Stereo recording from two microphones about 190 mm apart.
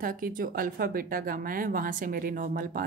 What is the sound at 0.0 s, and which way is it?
Speech, 45° right (ahead or behind).